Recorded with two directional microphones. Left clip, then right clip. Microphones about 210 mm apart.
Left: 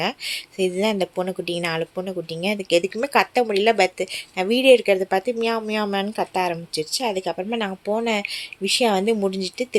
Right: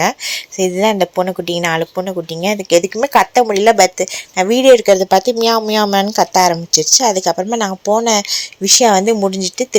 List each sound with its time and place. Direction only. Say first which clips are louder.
0.5 s speech: right 8 dB; 15° right (ahead or behind)
4.9 s speech: right 9 dB; 30° right (ahead or behind)